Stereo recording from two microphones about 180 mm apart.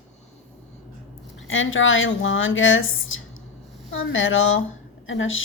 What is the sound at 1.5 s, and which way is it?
Speech, 90° left.